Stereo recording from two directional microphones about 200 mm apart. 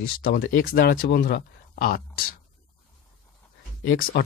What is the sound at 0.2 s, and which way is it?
Speech, 45° left (ahead or behind).